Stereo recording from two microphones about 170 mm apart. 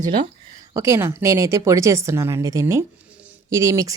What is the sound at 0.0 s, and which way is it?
A woman's voice, 25° right (ahead or behind).